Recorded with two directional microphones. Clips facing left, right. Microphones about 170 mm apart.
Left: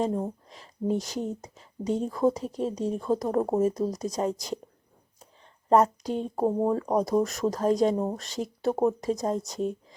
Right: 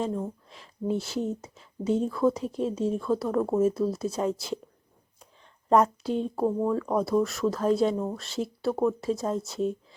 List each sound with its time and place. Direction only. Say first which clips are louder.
0.0 s speech: left 2 dB; 35° left (ahead or behind)
5.6 s speech: left 1 dB; 35° left (ahead or behind)